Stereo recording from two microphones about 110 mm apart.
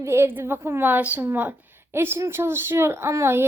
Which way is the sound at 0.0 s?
25° right (ahead or behind).